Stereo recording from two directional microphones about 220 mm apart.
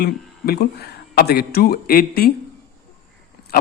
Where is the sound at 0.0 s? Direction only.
45° left (ahead or behind).